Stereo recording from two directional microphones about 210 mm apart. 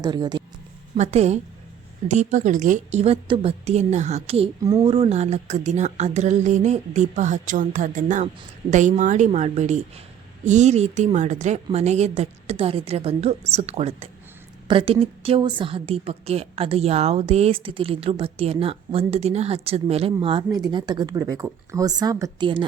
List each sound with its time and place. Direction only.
0.0 s a woman's voice: 20° right (ahead or behind)
0.9 s a woman's voice: 30° right (ahead or behind)